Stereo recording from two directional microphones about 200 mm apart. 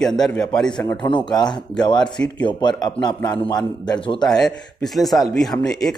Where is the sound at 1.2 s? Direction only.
20° left (ahead or behind).